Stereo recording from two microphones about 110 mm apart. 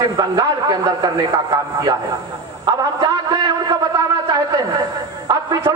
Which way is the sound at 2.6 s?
35° right (ahead or behind).